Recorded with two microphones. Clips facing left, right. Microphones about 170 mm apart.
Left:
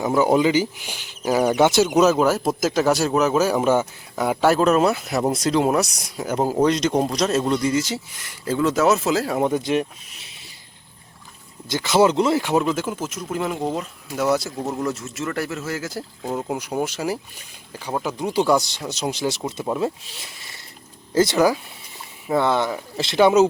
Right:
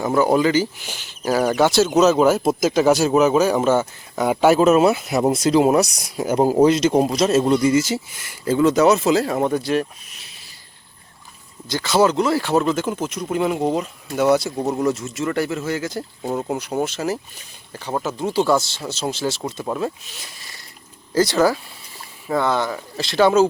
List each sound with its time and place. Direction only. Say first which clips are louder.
0.2 s speech: right 1 dB; 15° left (ahead or behind)
4.1 s speech: right 3 dB; centre (ahead or behind)
6.1 s speech: right 5 dB; 15° right (ahead or behind)
9.4 s speech: right 1 dB; 20° left (ahead or behind)
11.7 s speech: even; 20° left (ahead or behind)
12.4 s speech: right 2 dB; 15° left (ahead or behind)
14.5 s speech: right 4 dB; 15° right (ahead or behind)
14.8 s speech: right 5 dB; centre (ahead or behind)
16.6 s speech: right 2 dB; 10° left (ahead or behind)